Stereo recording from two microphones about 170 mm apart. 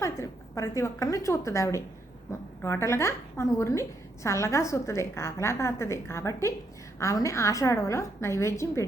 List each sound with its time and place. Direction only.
0.0 s a woman's voice: 15° left (ahead or behind)